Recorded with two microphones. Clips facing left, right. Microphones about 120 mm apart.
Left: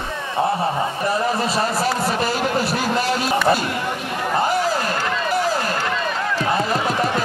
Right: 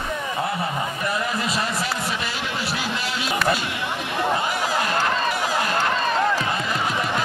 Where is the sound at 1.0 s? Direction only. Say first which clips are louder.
Left 5 dB; 35° left (ahead or behind).